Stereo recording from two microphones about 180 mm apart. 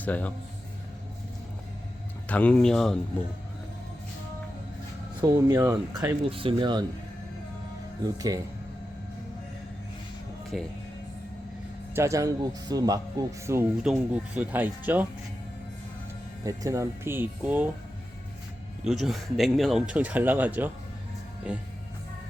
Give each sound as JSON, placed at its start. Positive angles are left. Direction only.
{"t": 0.0, "sound": "speech", "side_deg": 10}
{"t": 2.2, "sound": "speech", "side_deg": 10}
{"t": 5.2, "sound": "speech", "side_deg": -20}
{"t": 8.0, "sound": "speech", "side_deg": -20}
{"t": 10.5, "sound": "speech", "side_deg": 0}
{"t": 11.9, "sound": "speech", "side_deg": -15}
{"t": 16.4, "sound": "speech", "side_deg": -20}
{"t": 18.9, "sound": "speech", "side_deg": 0}